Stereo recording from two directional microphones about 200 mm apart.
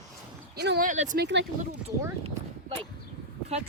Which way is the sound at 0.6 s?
55° right (ahead or behind).